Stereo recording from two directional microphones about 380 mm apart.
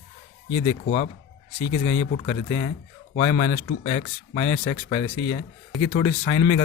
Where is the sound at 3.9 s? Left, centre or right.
Centre.